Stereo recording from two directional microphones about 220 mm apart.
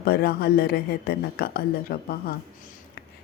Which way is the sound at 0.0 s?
45° left (ahead or behind).